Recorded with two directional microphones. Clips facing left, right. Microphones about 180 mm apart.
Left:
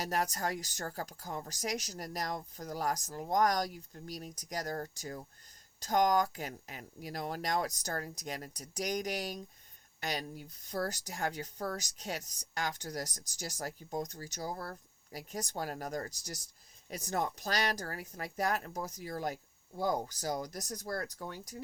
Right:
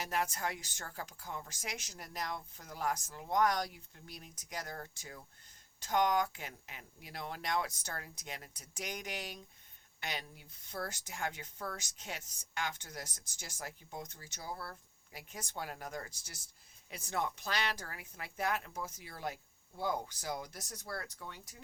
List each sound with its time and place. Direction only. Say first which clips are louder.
0.0 s speech: left 3 dB; 40° left (ahead or behind)